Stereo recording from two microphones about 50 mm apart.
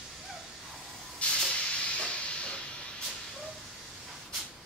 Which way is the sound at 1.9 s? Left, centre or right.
Left.